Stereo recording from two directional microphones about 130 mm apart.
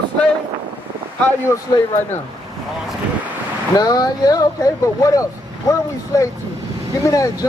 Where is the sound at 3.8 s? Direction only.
30° left (ahead or behind).